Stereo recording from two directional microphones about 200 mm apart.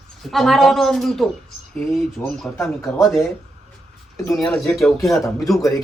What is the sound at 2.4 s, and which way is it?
Speech, centre (ahead or behind).